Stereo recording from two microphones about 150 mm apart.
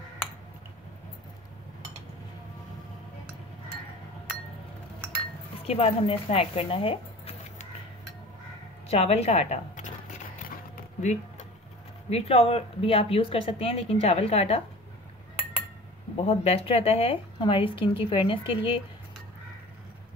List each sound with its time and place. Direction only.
5.6 s speech: 40° left (ahead or behind)
8.8 s zipper: 45° left (ahead or behind)
12.1 s speech: 45° left (ahead or behind)
16.2 s speech: 40° left (ahead or behind)